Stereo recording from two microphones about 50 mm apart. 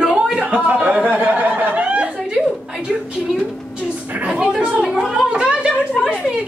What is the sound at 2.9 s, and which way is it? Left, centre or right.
Speech, centre.